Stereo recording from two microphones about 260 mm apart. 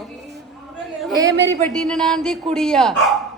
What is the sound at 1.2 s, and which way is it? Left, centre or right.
Speech, right.